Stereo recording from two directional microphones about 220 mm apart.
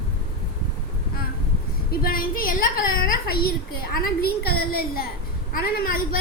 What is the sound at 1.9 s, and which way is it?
A woman's voice, 40° left (ahead or behind).